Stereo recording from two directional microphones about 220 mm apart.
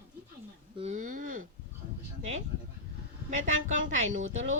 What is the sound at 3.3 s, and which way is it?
Speech, 35° right (ahead or behind).